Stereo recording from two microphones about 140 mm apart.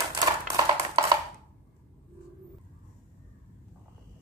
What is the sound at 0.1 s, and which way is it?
Music, 30° right (ahead or behind).